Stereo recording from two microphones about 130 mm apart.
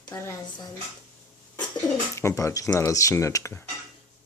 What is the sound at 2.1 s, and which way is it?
Speech, 25° left (ahead or behind).